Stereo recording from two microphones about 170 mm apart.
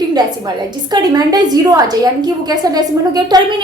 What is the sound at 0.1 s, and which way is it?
A woman's voice, 25° right (ahead or behind).